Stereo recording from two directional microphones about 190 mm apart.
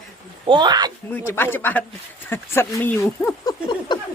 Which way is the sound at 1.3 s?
10° left (ahead or behind).